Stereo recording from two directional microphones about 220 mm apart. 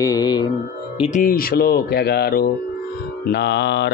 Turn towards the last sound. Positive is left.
turn(degrees=50)  # may be behind; listen again after turning